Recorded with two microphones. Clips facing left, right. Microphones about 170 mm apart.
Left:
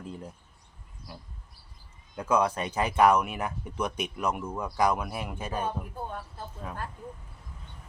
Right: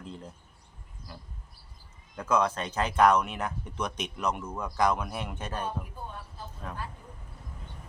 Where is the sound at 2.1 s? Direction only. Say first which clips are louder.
Left 1 dB; 10° left (ahead or behind).